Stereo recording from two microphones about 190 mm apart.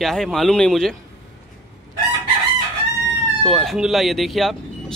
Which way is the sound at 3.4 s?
Centre (ahead or behind).